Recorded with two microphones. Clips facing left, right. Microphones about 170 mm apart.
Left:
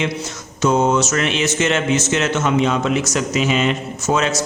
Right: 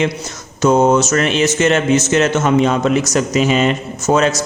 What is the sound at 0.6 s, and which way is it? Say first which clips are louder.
A man's voice: right 4 dB; 45° right (ahead or behind).